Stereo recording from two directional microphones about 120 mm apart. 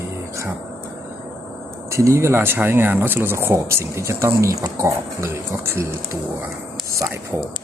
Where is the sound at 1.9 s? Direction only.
25° right (ahead or behind).